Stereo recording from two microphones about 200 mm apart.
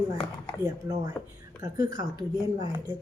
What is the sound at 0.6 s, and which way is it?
A woman's voice, 20° right (ahead or behind).